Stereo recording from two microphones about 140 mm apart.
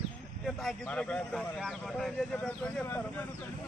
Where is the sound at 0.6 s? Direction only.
10° left (ahead or behind).